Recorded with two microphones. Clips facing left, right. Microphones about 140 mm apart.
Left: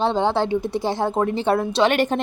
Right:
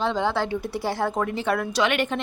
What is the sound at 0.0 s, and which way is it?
Speech, 30° left (ahead or behind).